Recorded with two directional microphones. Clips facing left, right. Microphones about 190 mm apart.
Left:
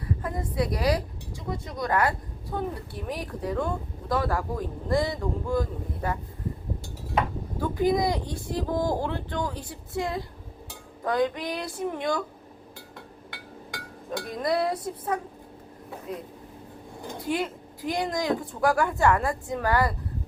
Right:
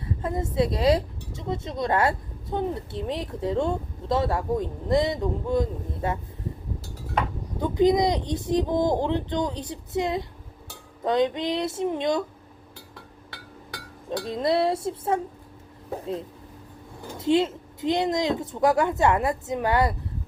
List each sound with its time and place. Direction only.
0.0 s speech: 25° right (ahead or behind)
7.6 s speech: 20° right (ahead or behind)
14.3 s speech: 25° right (ahead or behind)
17.2 s speech: 25° right (ahead or behind)